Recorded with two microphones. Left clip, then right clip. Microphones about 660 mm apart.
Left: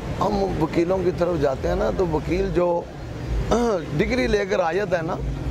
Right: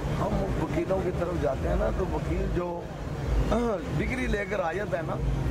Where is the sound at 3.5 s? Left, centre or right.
Left.